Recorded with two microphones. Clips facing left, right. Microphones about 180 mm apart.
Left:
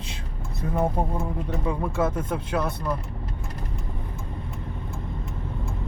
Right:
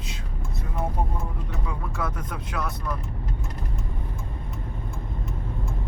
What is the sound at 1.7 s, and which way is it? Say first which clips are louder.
Speech: left 7 dB; 25° left (ahead or behind).